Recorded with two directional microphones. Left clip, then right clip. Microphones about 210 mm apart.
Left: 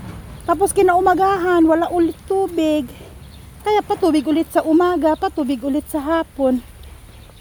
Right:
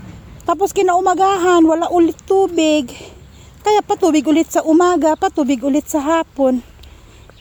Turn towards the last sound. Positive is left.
turn(degrees=-25)  # may be behind; listen again after turning